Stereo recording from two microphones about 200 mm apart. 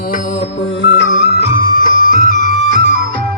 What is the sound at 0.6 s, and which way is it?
Music, 60° left (ahead or behind).